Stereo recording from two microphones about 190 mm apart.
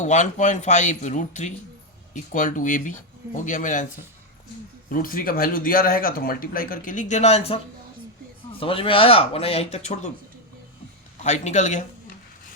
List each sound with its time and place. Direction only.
0.0 s speech: 40° left (ahead or behind)
4.9 s speech: 45° left (ahead or behind)
11.2 s speech: 40° left (ahead or behind)